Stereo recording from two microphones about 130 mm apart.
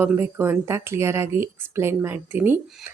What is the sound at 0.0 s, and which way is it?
Speech, 15° right (ahead or behind).